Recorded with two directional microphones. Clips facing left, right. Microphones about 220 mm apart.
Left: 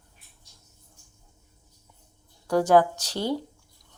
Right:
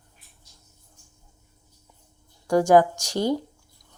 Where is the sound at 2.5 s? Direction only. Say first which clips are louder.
Right 2 dB; 15° right (ahead or behind).